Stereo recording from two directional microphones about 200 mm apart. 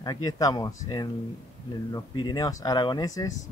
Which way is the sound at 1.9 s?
20° left (ahead or behind).